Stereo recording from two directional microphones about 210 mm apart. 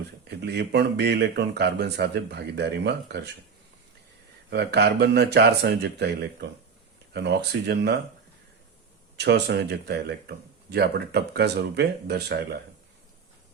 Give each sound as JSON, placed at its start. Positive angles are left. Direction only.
{"t": 0.3, "sound": "speech", "side_deg": -55}
{"t": 4.4, "sound": "speech", "side_deg": -55}
{"t": 9.1, "sound": "speech", "side_deg": -50}